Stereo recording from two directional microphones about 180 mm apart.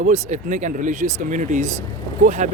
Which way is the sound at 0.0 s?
40° right (ahead or behind).